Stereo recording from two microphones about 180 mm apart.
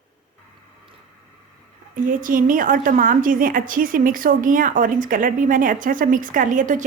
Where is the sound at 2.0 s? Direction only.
50° right (ahead or behind).